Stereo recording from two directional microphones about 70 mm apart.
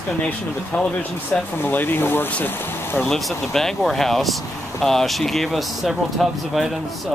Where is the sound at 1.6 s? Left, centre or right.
Left.